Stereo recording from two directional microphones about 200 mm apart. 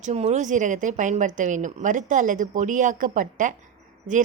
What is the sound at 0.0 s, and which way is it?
A woman's voice, 35° right (ahead or behind).